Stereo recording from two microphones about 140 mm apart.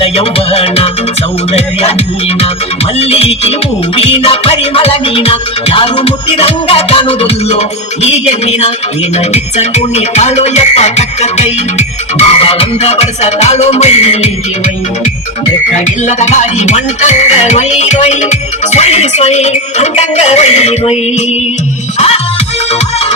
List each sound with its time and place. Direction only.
0.0 s music: 40° left (ahead or behind)
3.0 s music: 45° left (ahead or behind)
16.0 s music: 55° left (ahead or behind)